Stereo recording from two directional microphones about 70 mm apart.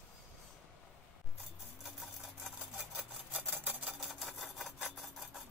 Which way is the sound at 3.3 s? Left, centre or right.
Right.